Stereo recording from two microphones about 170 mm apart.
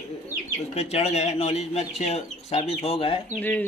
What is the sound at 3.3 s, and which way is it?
Speech, 10° left (ahead or behind).